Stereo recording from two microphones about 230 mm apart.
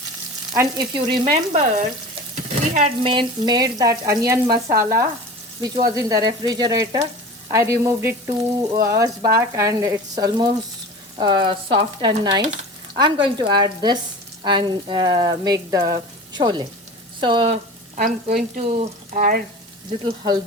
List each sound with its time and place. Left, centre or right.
0.5 s frying: centre
1.2 s speech: right
2.7 s frying: right
11.2 s speech: centre; by 19.4 s right
20.1 s frying: centre